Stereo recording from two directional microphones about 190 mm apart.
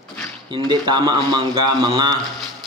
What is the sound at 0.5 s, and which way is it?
A man's voice, 25° right (ahead or behind).